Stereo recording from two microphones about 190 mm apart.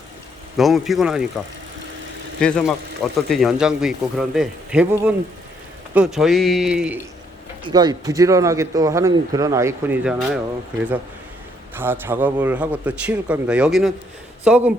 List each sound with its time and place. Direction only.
0.5 s speech: centre (ahead or behind)
2.4 s speech: 5° left (ahead or behind)
7.6 s speech: 20° right (ahead or behind); by 10.4 s 5° right (ahead or behind)
11.8 s speech: 10° right (ahead or behind)